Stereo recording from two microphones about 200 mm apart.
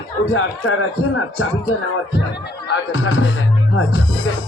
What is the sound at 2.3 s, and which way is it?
Speech, 70° left (ahead or behind).